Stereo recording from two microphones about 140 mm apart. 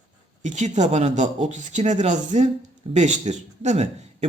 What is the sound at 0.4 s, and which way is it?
Speech, 60° right (ahead or behind).